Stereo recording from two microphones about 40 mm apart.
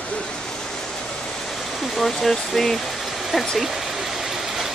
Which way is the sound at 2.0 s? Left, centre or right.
Centre.